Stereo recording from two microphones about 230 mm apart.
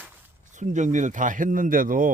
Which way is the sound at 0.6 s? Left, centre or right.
Right.